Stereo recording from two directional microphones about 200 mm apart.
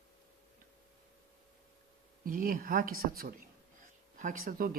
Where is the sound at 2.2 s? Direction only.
45° right (ahead or behind).